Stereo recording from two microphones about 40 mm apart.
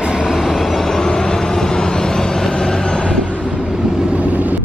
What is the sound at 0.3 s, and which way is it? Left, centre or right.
Vehicle, centre.